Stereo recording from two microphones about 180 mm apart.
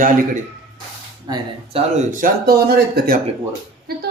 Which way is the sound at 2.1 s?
50° right (ahead or behind).